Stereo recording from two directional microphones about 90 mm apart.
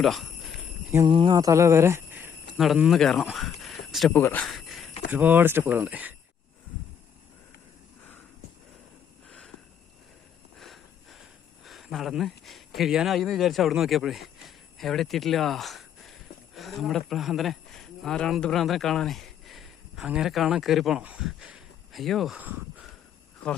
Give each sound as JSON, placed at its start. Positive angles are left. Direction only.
{"t": 0.0, "sound": "jingle bell", "side_deg": 0}
{"t": 1.0, "sound": "a sound", "side_deg": -60}
{"t": 1.4, "sound": "speech", "side_deg": -35}
{"t": 2.9, "sound": "speech", "side_deg": 0}
{"t": 3.3, "sound": "a sound", "side_deg": 0}
{"t": 4.1, "sound": "speech", "side_deg": 25}
{"t": 4.4, "sound": "cricket", "side_deg": 0}
{"t": 5.1, "sound": "speech", "side_deg": -20}
{"t": 10.6, "sound": "a sound", "side_deg": 0}
{"t": 16.6, "sound": "speech", "side_deg": 0}
{"t": 22.4, "sound": "speech", "side_deg": -20}